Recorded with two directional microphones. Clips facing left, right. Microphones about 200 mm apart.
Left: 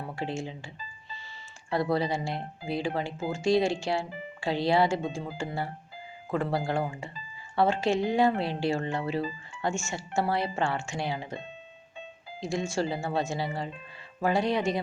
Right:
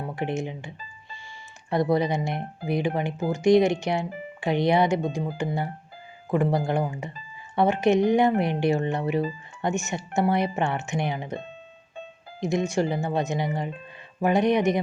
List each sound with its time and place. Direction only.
0.0 s speech: 20° right (ahead or behind)
1.7 s speech: 20° right (ahead or behind)
12.4 s speech: 20° right (ahead or behind)